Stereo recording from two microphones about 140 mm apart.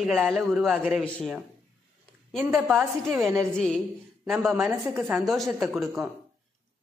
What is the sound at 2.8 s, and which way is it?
Speech, 15° right (ahead or behind).